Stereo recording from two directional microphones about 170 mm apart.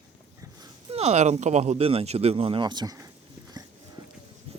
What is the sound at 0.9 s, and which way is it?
Speech, 40° right (ahead or behind).